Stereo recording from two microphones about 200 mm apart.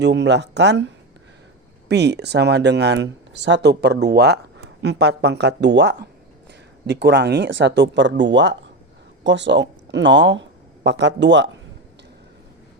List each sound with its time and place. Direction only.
0.0 s speech: 60° right (ahead or behind)
1.9 s speech: 55° right (ahead or behind)